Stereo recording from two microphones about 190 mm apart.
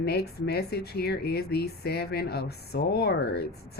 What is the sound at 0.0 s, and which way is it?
Speech, 55° left (ahead or behind).